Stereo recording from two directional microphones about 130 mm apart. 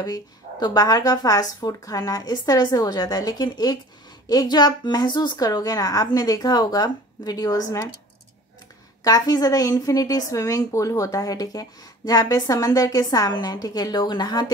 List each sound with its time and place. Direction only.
0.0 s a woman's voice: 30° left (ahead or behind)
9.0 s a woman's voice: 30° left (ahead or behind)